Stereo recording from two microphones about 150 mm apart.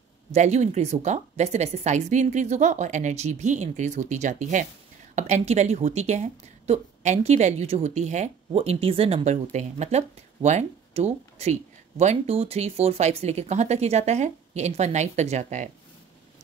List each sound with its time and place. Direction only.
0.3 s speech: 50° right (ahead or behind)
8.5 s speech: 40° right (ahead or behind)